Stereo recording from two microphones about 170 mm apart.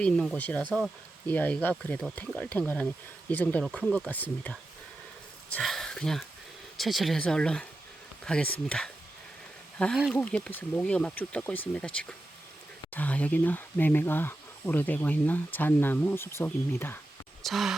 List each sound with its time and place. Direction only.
0.0 s speech: 5° left (ahead or behind)
17.4 s speech: centre (ahead or behind)